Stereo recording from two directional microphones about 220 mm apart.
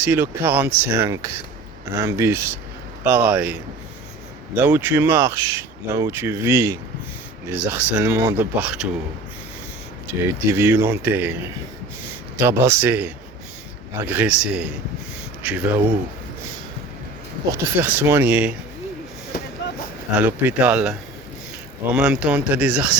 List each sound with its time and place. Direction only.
0.0 s speech: 10° right (ahead or behind)
10.1 s speech: 10° right (ahead or behind)
17.5 s speech: 10° right (ahead or behind)
19.3 s vehicle: 45° left (ahead or behind)
20.1 s speech: 5° right (ahead or behind)
21.9 s speech: 5° right (ahead or behind)